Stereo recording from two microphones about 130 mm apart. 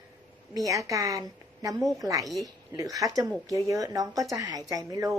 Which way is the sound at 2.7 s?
25° right (ahead or behind).